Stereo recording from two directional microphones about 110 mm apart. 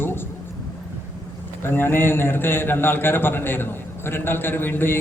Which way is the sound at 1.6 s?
20° left (ahead or behind).